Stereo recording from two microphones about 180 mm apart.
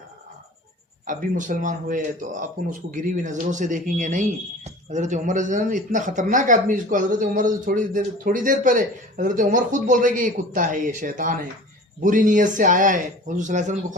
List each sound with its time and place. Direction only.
1.0 s speech: 45° right (ahead or behind)